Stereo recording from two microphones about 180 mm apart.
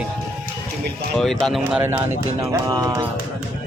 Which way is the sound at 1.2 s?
Centre (ahead or behind).